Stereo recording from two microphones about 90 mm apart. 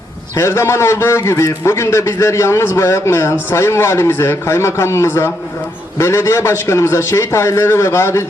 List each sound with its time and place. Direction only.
0.3 s a man's voice: 30° left (ahead or behind)